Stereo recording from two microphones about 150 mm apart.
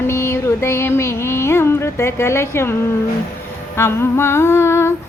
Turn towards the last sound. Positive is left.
turn(degrees=15)  # may be behind; listen again after turning